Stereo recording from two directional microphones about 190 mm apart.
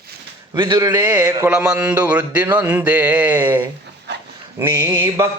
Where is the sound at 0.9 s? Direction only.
15° right (ahead or behind).